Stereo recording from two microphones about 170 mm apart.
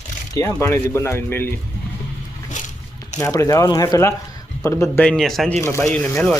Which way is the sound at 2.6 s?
45° left (ahead or behind).